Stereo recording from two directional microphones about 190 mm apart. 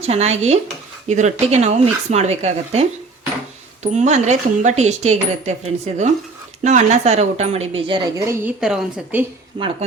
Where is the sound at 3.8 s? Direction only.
40° right (ahead or behind); by 8.5 s 15° right (ahead or behind).